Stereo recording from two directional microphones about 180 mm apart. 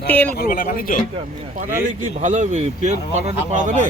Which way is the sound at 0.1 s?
10° left (ahead or behind).